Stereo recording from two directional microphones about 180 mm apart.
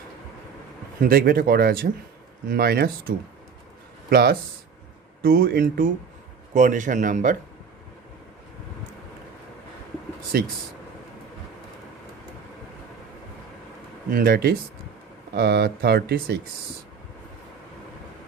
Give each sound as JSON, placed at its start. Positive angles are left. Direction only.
{"t": 1.0, "sound": "speech", "side_deg": -55}
{"t": 4.1, "sound": "speech", "side_deg": -60}
{"t": 6.5, "sound": "speech", "side_deg": -45}
{"t": 10.3, "sound": "speech", "side_deg": -60}
{"t": 14.1, "sound": "speech", "side_deg": -55}